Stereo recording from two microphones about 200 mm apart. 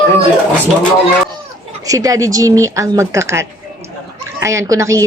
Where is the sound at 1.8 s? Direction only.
15° right (ahead or behind).